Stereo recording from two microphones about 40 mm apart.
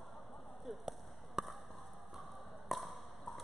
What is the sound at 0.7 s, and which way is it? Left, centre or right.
Basketball bounce, centre.